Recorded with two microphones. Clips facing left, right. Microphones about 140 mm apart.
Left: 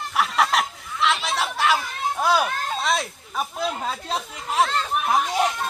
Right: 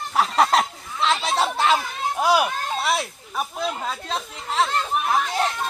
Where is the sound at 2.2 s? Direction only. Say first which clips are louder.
Right 2 dB; 15° right (ahead or behind); by 4.7 s 5° left (ahead or behind).